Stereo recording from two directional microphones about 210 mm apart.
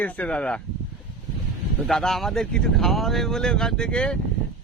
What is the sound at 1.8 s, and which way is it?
Speech, centre (ahead or behind).